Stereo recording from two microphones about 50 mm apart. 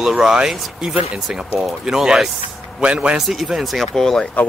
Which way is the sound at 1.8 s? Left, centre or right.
Centre.